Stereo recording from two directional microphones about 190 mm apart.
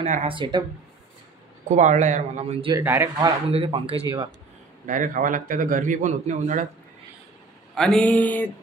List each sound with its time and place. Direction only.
0.0 s speech: 35° right (ahead or behind)
1.7 s speech: 40° right (ahead or behind)
2.8 s speech: 10° right (ahead or behind)
3.2 s speech: 25° right (ahead or behind)
4.8 s a man's voice: 45° right (ahead or behind)
7.7 s a sound: 5° left (ahead or behind)